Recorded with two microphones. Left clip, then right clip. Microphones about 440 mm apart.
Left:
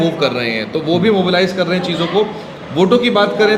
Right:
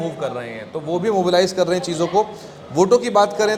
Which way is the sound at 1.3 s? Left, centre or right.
Right.